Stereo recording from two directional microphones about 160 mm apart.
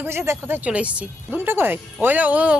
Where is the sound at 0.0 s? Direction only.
15° right (ahead or behind).